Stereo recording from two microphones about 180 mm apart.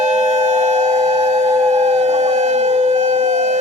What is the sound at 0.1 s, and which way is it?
Civil defense siren, 40° right (ahead or behind).